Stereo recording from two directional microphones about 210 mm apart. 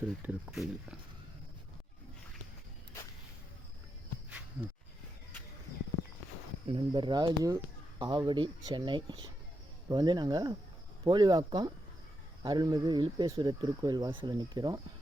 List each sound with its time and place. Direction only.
0.2 s speech: 5° right (ahead or behind)
6.7 s speech: 25° right (ahead or behind)